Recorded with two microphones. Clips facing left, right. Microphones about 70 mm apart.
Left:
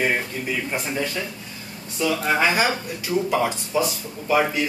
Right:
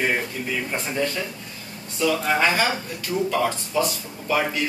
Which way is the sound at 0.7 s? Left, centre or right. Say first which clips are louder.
Right 1 dB; centre.